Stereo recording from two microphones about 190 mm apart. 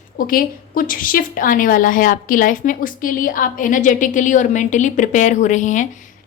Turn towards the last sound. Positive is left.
turn(degrees=40)  # may be behind; listen again after turning